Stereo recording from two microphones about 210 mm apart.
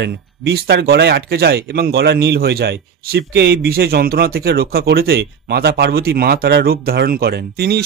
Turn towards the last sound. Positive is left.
turn(degrees=-50)  # may be behind; listen again after turning